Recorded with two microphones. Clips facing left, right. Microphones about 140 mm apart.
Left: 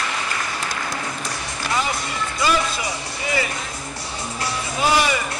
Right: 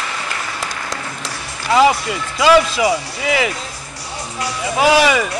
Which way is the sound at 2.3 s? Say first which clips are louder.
Right 10 dB; 90° right.